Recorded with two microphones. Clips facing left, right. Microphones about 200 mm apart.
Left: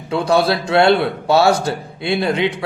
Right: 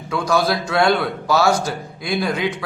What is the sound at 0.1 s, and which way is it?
A man's voice, 30° left (ahead or behind).